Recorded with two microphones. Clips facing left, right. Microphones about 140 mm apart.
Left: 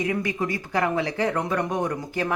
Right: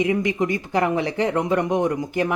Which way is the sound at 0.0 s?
20° right (ahead or behind).